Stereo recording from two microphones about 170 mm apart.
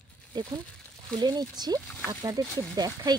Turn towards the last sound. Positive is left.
turn(degrees=-25)  # may be behind; listen again after turning